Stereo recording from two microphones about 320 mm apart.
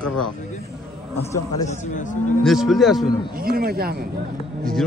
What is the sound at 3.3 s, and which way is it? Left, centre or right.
Speech, right.